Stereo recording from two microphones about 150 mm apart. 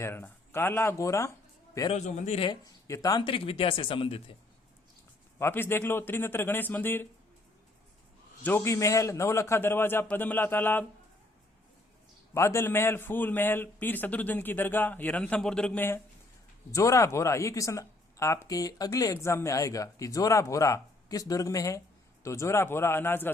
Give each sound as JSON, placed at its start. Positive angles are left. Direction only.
{"t": 0.0, "sound": "a man's voice", "side_deg": 15}
{"t": 1.9, "sound": "a man's voice", "side_deg": 50}
{"t": 2.5, "sound": "speech", "side_deg": 20}
{"t": 5.4, "sound": "a man's voice", "side_deg": 15}
{"t": 8.4, "sound": "a man's voice", "side_deg": 15}
{"t": 12.3, "sound": "a man's voice", "side_deg": 20}